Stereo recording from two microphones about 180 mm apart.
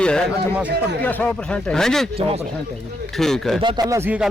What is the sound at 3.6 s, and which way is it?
Speech, 25° right (ahead or behind).